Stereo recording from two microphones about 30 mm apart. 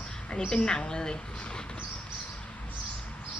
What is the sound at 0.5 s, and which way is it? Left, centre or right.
Speech, left.